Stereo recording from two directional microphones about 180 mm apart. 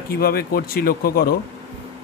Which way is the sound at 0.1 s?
60° left (ahead or behind).